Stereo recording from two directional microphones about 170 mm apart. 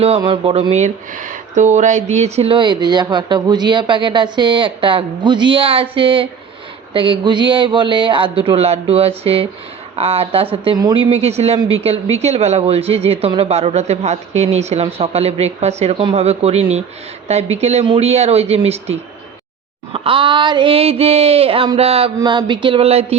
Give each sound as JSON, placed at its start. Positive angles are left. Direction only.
{"t": 0.2, "sound": "speech", "side_deg": -35}